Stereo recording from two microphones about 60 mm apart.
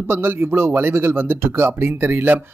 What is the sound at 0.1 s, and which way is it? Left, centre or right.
A man's voice, right.